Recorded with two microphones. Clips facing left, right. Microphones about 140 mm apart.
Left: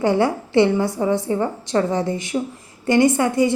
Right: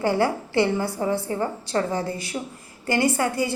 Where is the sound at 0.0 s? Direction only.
20° left (ahead or behind).